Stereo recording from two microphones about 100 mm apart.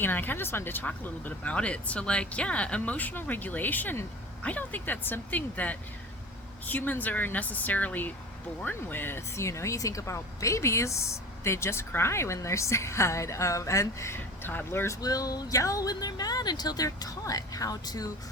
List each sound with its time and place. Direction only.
0.0 s speech: 20° left (ahead or behind)
15.0 s a woman's voice: 40° left (ahead or behind)